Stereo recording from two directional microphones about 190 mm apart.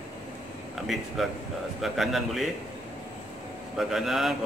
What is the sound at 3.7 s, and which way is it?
Speech, centre (ahead or behind).